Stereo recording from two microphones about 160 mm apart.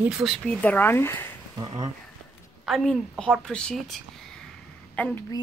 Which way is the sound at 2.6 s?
Centre (ahead or behind).